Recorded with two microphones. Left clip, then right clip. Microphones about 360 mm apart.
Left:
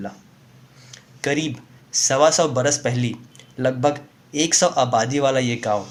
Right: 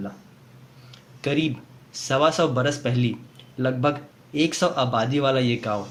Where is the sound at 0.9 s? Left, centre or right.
Centre.